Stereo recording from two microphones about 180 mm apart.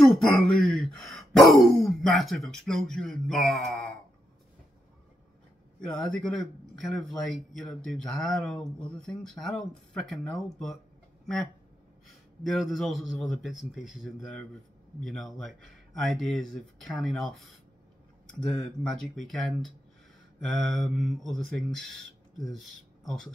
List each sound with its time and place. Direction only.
0.0 s speech: centre (ahead or behind)
5.8 s speech: 5° left (ahead or behind)
6.7 s speech: 85° right
7.1 s speech: centre (ahead or behind)
12.4 s speech: centre (ahead or behind)
18.8 s speech: centre (ahead or behind)